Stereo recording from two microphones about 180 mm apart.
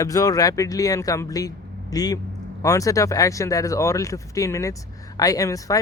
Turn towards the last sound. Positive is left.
turn(degrees=20)  # may be behind; listen again after turning